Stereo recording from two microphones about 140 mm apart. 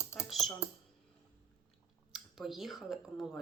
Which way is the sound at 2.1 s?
Centre (ahead or behind).